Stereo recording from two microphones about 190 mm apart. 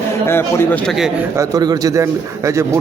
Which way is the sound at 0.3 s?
10° left (ahead or behind).